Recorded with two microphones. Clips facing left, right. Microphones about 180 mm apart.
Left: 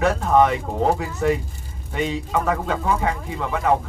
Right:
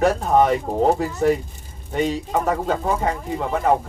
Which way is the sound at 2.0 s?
40° right (ahead or behind).